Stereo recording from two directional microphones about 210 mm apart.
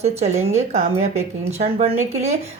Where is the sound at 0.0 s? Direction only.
30° right (ahead or behind).